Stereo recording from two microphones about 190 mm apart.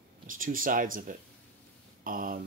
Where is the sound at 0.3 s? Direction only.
45° right (ahead or behind).